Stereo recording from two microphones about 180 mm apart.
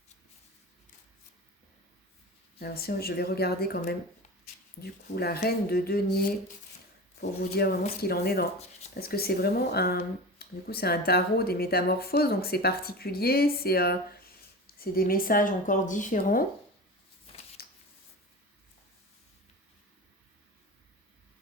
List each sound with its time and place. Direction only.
2.6 s speech: 60° left (ahead or behind)
7.2 s speech: 60° left (ahead or behind)
17.3 s a sound: 35° left (ahead or behind)